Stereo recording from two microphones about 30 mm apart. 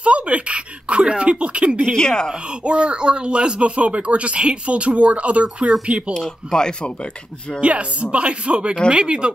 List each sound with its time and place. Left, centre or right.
0.0 s a sound: right
1.1 s speech: right
2.0 s speech: left
2.6 s speech: right
6.1 s speech: left
7.6 s speech: right